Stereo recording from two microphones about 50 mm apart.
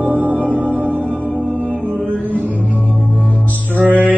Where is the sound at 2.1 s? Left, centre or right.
Right.